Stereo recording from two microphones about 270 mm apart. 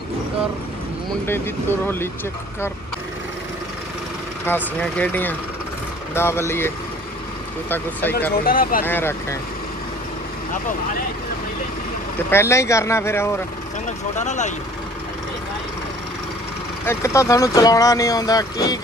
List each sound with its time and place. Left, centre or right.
1.2 s speech: centre
4.5 s speech: centre
8.3 s speech: left
8.8 s speech: centre
12.3 s speech: centre
14.1 s speech: left
16.8 s speech: centre